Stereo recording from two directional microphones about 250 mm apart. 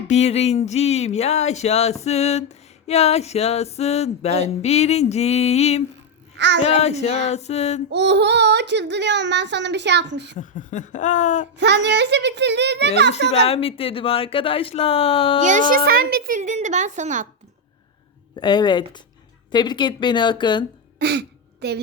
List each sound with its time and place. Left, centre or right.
0.1 s speech: left
6.3 s a child's voice: right
6.6 s speech: left
7.9 s speech: right
10.3 s speech: left
11.5 s speech: right
13.3 s speech: left
15.4 s speech: right
18.3 s speech: centre
21.0 s throat clearing: right